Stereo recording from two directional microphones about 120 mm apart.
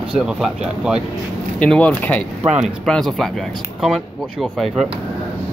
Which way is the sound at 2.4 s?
10° right (ahead or behind).